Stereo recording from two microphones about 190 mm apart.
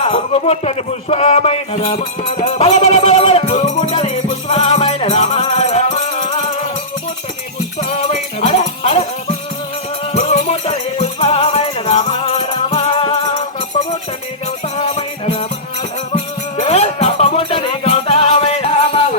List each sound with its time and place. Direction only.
0.0 s a sound: 30° left (ahead or behind)
7.8 s music: 30° left (ahead or behind)
10.2 s music: 35° left (ahead or behind)
16.6 s music: 35° left (ahead or behind)